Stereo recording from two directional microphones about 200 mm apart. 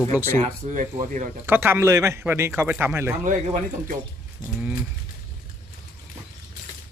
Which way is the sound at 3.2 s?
40° right (ahead or behind).